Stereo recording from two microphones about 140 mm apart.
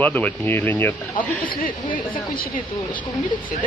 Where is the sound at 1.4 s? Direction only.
85° left.